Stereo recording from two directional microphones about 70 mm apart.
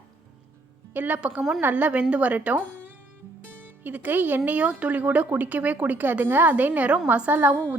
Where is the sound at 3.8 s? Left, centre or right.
Right.